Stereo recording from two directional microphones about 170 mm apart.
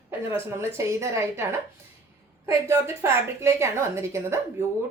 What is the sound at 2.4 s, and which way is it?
A woman's voice, 15° right (ahead or behind).